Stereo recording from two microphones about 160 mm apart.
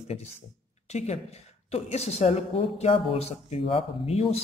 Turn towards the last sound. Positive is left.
turn(degrees=35)  # may be behind; listen again after turning